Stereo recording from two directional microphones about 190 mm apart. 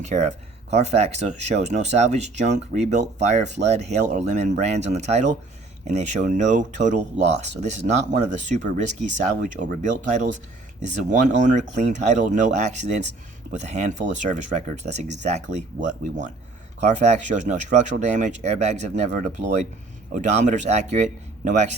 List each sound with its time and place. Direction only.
0.0 s speech: 40° right (ahead or behind)
10.8 s speech: 40° right (ahead or behind)
16.8 s speech: 40° right (ahead or behind)